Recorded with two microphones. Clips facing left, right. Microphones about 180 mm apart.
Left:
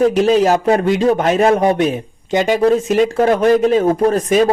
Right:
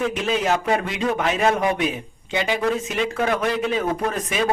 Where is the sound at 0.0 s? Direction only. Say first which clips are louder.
Left 10 dB; 40° left (ahead or behind).